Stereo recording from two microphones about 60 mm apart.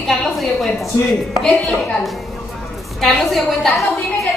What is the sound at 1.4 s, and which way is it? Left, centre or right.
Speech, centre.